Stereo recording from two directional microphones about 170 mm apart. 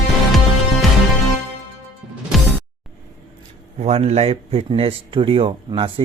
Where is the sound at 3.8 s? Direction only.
40° right (ahead or behind).